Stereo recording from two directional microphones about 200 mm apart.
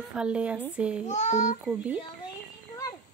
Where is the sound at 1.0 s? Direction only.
35° left (ahead or behind).